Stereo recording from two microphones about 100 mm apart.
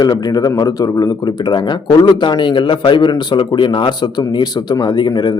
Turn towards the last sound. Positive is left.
turn(degrees=45)  # may be behind; listen again after turning